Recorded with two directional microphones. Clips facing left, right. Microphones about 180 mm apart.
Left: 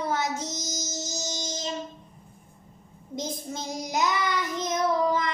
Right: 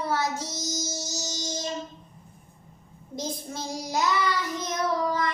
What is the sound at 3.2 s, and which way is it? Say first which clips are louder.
Child singing: even; 20° left (ahead or behind).